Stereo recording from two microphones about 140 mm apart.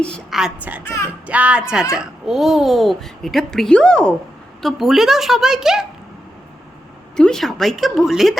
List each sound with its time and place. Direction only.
0.0 s speech: 5° left (ahead or behind)
0.3 s a child's voice: 5° right (ahead or behind)
7.2 s a child's voice: 5° left (ahead or behind)